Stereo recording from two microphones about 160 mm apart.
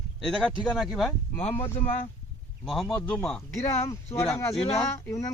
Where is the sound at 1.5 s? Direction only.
15° left (ahead or behind).